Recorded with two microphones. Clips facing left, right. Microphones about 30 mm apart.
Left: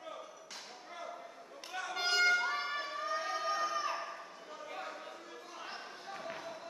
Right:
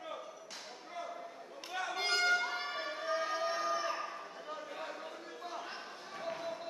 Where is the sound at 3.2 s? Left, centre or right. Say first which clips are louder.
Left 1 dB; centre.